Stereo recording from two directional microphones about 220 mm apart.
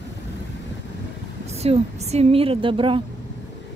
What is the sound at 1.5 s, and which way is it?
A woman's voice, 30° right (ahead or behind).